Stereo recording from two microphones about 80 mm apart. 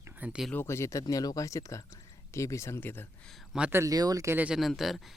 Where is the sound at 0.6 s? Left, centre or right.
Left.